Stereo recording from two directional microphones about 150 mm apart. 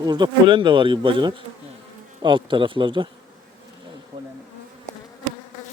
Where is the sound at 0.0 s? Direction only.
30° right (ahead or behind).